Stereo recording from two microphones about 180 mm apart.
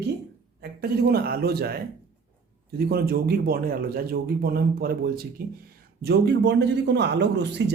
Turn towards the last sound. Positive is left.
turn(degrees=-70)  # may be behind; listen again after turning